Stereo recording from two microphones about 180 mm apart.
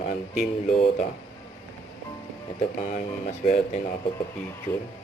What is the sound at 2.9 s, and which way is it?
Speech, 45° left (ahead or behind).